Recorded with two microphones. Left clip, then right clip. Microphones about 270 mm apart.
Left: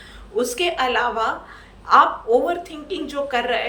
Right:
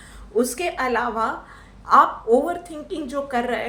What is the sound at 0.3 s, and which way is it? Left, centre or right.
A woman's voice, centre.